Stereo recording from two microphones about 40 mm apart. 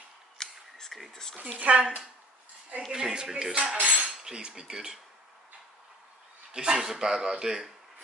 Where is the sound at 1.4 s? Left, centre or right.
Right.